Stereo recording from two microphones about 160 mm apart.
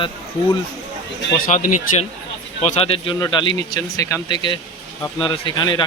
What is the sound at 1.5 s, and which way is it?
Speech, 50° left (ahead or behind).